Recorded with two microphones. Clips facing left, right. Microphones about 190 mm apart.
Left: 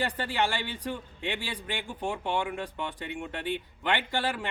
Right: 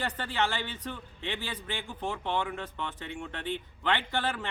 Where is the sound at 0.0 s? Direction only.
10° left (ahead or behind).